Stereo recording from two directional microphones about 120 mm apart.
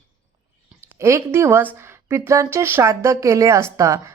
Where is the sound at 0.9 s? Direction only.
25° right (ahead or behind).